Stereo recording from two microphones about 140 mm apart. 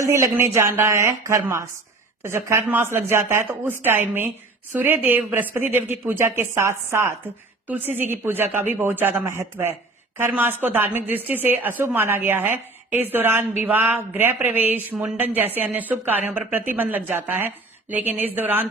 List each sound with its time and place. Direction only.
0.0 s a woman's voice: 20° right (ahead or behind)